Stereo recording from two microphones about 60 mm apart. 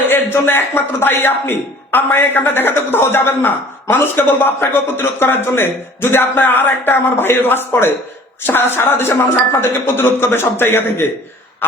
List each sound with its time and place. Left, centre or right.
0.1 s speech: left